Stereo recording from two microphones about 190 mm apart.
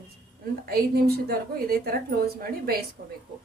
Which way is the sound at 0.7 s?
55° right (ahead or behind).